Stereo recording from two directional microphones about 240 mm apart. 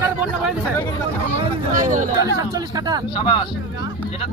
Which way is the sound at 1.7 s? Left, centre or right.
Right.